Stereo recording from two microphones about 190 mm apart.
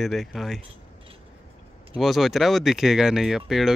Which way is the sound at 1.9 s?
Centre (ahead or behind).